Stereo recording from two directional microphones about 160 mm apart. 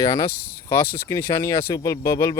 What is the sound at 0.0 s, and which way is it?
Speech, 20° left (ahead or behind).